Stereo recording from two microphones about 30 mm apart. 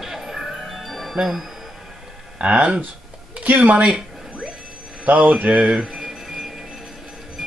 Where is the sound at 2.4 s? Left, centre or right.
Right.